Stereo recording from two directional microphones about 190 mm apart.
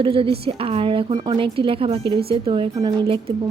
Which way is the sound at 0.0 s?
30° right (ahead or behind).